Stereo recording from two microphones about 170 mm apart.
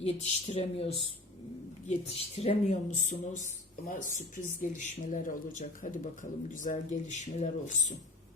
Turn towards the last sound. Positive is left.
turn(degrees=45)  # may be behind; listen again after turning